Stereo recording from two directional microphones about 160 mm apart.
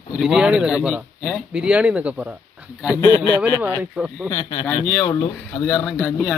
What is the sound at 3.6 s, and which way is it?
Speech, 10° right (ahead or behind).